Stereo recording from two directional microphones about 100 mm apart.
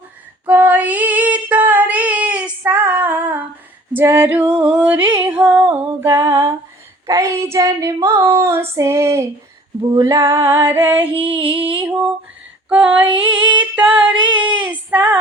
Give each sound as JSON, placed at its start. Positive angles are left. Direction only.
{"t": 0.4, "sound": "female singing", "side_deg": -15}
{"t": 6.1, "sound": "a sound", "side_deg": -25}
{"t": 8.0, "sound": "female singing", "side_deg": -25}
{"t": 11.1, "sound": "female singing", "side_deg": -60}
{"t": 11.8, "sound": "a sound", "side_deg": -15}
{"t": 12.6, "sound": "female singing", "side_deg": -10}
{"t": 14.3, "sound": "child singing", "side_deg": -15}